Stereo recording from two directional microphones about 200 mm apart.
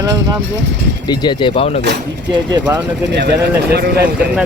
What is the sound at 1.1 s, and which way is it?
Speech, 25° left (ahead or behind).